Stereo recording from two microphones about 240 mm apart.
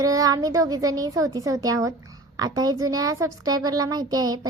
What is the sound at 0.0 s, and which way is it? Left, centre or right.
Speech, centre.